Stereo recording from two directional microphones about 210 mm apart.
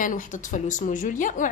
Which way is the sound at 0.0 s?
40° left (ahead or behind).